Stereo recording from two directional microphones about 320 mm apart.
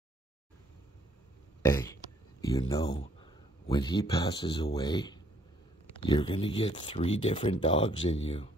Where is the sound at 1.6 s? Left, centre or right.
Centre.